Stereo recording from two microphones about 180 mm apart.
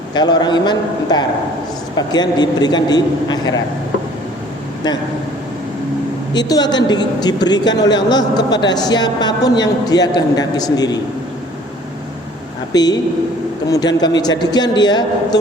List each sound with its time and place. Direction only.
0.1 s a man's voice: 25° left (ahead or behind)
6.5 s a man's voice: 20° left (ahead or behind)
12.7 s a man's voice: 20° left (ahead or behind)
14.0 s a man's voice: 20° left (ahead or behind)